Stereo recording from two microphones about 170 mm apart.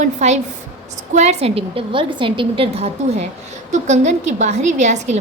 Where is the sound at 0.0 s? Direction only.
40° right (ahead or behind).